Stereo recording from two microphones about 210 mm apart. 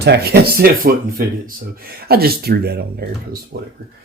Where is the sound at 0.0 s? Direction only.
50° right (ahead or behind).